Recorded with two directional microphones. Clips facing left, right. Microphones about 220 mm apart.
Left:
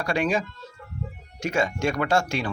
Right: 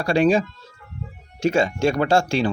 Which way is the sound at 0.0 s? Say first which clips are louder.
Right 7 dB; 30° right (ahead or behind).